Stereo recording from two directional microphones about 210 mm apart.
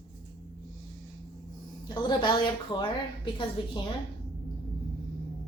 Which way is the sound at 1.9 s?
20° left (ahead or behind).